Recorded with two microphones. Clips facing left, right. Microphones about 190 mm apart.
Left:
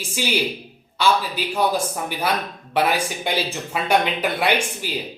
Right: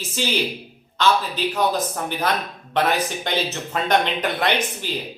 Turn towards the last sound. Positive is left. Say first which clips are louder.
# left 1 dB
turn(degrees=10)  # may be behind; listen again after turning